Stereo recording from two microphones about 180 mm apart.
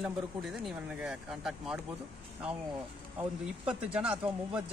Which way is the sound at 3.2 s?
10° right (ahead or behind).